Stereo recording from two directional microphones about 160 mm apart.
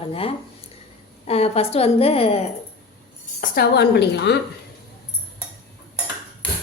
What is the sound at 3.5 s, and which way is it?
Speech, 80° left.